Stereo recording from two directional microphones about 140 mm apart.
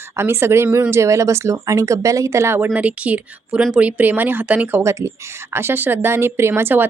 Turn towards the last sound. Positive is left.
turn(degrees=-15)  # may be behind; listen again after turning